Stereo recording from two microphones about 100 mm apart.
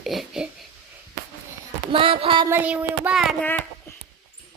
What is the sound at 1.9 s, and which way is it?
Speech, 65° right (ahead or behind).